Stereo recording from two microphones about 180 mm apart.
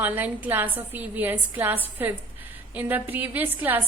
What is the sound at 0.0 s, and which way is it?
A woman's voice, 10° right (ahead or behind).